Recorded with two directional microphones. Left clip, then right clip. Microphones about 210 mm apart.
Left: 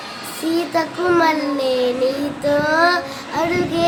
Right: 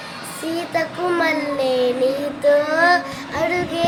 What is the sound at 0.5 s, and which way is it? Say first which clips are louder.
Child singing: left 2 dB; 15° left (ahead or behind).